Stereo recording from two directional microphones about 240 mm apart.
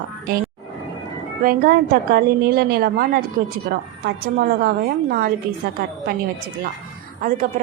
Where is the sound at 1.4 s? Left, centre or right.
Right.